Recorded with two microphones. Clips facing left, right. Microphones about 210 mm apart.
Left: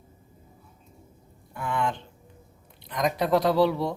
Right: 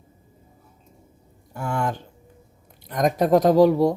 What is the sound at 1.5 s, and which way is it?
Speech, 45° right (ahead or behind).